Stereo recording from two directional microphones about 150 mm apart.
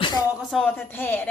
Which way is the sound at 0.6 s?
15° left (ahead or behind).